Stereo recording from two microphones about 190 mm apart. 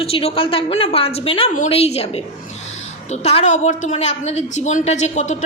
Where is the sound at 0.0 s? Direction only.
30° left (ahead or behind).